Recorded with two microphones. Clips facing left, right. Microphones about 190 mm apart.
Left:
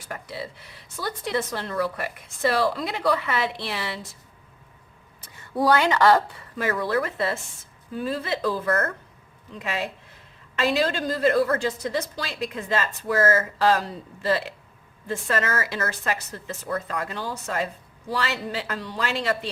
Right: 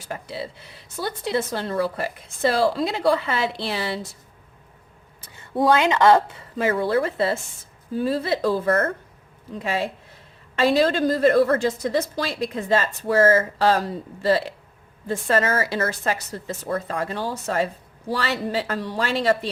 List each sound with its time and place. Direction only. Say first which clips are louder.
0.1 s speech: right 3 dB; 25° right (ahead or behind)
5.4 s a woman's voice: right 2 dB; 25° right (ahead or behind)